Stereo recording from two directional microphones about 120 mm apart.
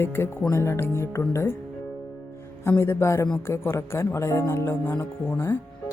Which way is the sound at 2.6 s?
20° left (ahead or behind).